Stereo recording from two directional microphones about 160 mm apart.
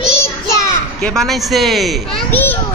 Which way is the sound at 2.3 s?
10° left (ahead or behind).